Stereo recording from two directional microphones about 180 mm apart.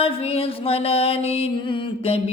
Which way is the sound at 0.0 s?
30° left (ahead or behind).